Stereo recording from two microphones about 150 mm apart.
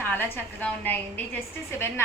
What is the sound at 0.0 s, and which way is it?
A woman's voice, 15° left (ahead or behind).